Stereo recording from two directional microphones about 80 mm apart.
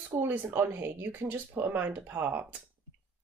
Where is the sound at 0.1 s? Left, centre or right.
Right.